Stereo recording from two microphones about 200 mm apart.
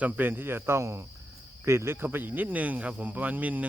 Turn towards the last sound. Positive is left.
turn(degrees=-10)  # may be behind; listen again after turning